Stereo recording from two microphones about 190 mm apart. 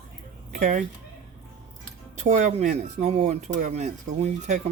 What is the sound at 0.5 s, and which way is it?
Speech, 45° right (ahead or behind).